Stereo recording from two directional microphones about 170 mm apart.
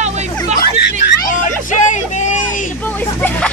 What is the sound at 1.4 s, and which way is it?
Vehicle, 45° left (ahead or behind).